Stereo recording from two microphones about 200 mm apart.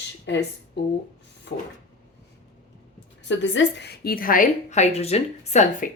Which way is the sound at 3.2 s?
65° left (ahead or behind).